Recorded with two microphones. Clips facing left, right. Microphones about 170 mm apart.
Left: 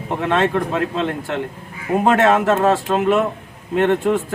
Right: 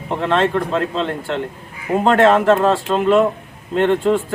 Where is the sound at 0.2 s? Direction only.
10° left (ahead or behind).